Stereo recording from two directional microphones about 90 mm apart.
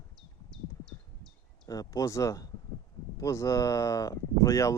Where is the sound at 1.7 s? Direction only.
40° left (ahead or behind).